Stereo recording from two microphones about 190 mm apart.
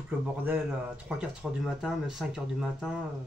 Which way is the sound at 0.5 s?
5° right (ahead or behind).